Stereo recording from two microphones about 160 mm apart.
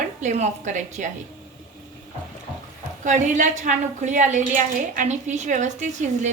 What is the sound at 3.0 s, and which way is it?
A woman's voice, 50° right (ahead or behind).